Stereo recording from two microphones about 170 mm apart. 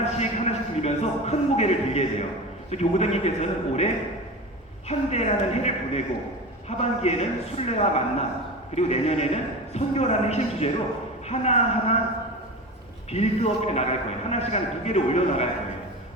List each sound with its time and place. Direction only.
0.0 s a man's voice: 40° left (ahead or behind)
4.9 s a man's voice: 40° left (ahead or behind)
13.1 s a man's voice: 40° left (ahead or behind)